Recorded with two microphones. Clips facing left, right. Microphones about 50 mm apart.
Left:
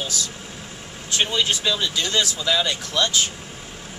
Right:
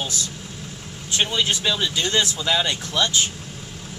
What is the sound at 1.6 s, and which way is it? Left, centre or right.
Speech, centre.